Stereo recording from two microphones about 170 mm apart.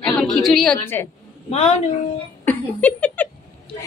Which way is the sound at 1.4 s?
40° left (ahead or behind).